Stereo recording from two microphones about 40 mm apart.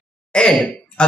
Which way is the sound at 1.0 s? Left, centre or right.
Left.